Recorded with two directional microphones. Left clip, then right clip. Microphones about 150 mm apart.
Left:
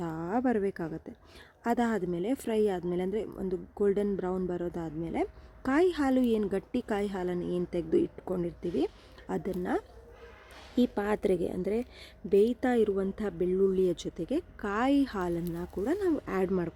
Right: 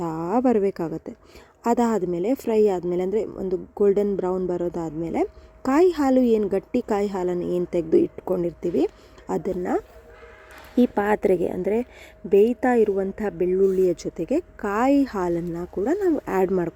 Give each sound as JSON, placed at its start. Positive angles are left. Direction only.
{"t": 0.0, "sound": "a woman's voice", "side_deg": -10}
{"t": 16.2, "sound": "speech", "side_deg": -15}